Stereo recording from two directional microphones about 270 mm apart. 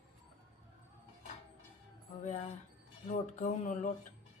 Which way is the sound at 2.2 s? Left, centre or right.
Left.